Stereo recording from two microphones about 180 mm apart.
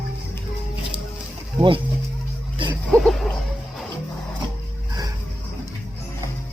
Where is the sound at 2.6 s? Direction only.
25° right (ahead or behind).